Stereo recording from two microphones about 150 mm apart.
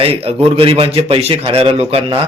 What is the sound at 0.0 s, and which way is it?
A man's voice, 40° right (ahead or behind).